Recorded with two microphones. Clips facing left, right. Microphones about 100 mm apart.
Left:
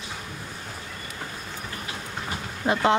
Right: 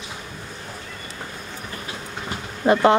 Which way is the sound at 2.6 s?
60° right (ahead or behind).